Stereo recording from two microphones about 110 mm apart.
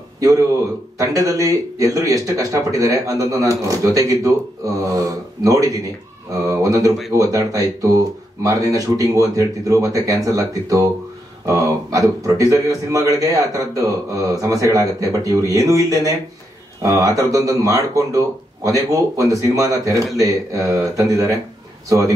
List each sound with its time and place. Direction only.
0.9 s a man's voice: 30° right (ahead or behind)